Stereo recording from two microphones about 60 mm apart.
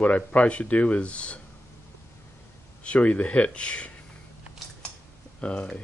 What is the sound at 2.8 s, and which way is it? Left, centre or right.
Speech, left.